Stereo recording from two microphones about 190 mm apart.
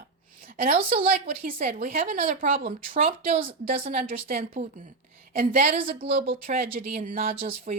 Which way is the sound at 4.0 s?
50° right (ahead or behind).